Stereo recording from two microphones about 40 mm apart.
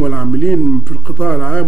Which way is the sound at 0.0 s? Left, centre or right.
Left.